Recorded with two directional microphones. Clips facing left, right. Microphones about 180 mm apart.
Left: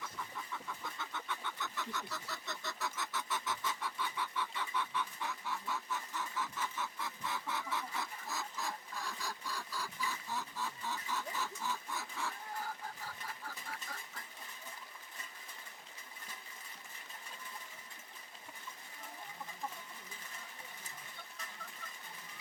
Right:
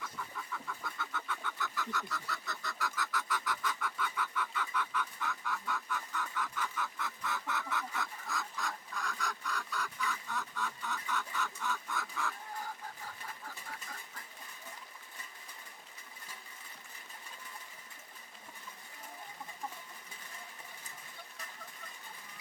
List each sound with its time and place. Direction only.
0.9 s chicken: 20° left (ahead or behind)